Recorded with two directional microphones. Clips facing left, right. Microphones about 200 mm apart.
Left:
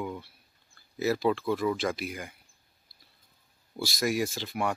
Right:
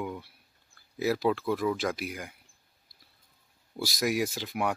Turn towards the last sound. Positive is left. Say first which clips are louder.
# even
turn(degrees=-5)  # may be behind; listen again after turning